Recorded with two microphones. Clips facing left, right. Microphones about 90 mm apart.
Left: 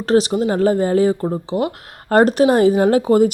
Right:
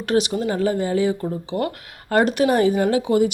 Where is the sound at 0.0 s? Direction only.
35° left (ahead or behind).